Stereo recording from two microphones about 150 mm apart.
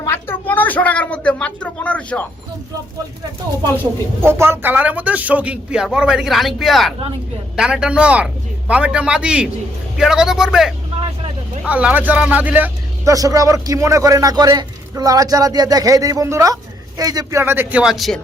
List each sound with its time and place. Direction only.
0.3 s speech: 10° left (ahead or behind)
4.2 s a man's voice: 15° right (ahead or behind)
13.1 s a man's voice: 25° right (ahead or behind)
17.4 s speech: 15° right (ahead or behind)